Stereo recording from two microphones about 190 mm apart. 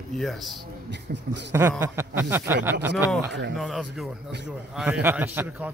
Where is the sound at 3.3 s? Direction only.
65° right (ahead or behind).